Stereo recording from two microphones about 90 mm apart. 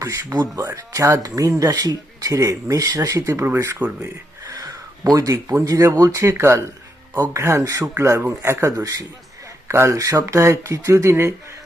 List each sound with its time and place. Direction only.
0.0 s speech: 35° right (ahead or behind)
4.0 s a sound: 40° right (ahead or behind)
5.6 s speech: 40° right (ahead or behind)